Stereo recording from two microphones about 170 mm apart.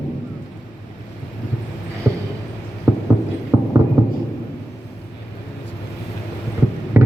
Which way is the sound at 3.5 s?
15° right (ahead or behind).